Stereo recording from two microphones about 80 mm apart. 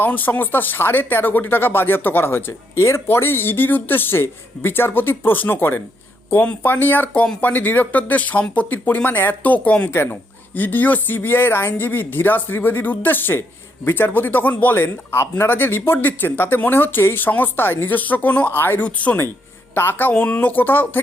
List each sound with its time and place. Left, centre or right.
0.0 s speech: left
9.9 s speech: left